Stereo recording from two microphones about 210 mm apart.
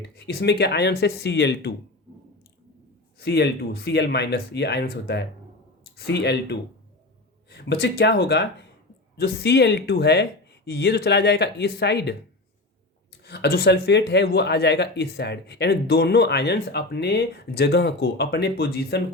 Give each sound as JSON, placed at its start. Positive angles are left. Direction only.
{"t": 0.3, "sound": "speech", "side_deg": 50}
{"t": 3.2, "sound": "speech", "side_deg": 50}
{"t": 13.2, "sound": "speech", "side_deg": 50}